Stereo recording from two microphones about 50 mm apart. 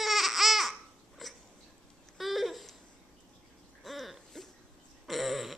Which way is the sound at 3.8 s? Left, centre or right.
Centre.